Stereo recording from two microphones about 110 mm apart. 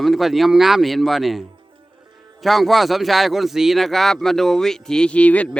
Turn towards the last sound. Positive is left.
turn(degrees=10)  # may be behind; listen again after turning